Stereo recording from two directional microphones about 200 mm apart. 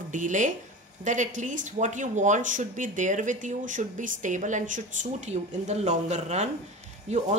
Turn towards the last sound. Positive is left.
turn(degrees=-35)  # may be behind; listen again after turning